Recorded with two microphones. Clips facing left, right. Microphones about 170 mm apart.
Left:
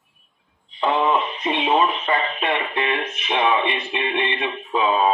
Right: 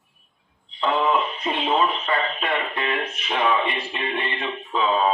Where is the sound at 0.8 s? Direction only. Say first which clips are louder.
Left 2 dB; 15° left (ahead or behind).